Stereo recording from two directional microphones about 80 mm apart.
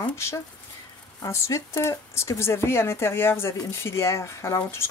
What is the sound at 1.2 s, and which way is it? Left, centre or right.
Speech, left.